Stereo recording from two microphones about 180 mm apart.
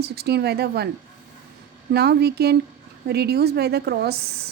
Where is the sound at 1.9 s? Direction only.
65° right (ahead or behind).